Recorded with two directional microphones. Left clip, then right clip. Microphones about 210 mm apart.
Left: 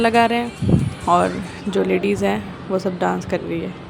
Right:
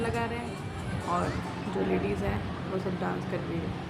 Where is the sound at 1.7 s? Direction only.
50° left (ahead or behind).